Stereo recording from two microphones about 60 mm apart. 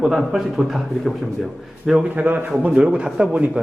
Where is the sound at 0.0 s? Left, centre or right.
Centre.